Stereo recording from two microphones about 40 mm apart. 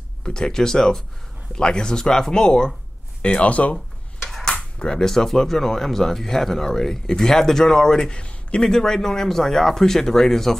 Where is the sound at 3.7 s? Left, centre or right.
Centre.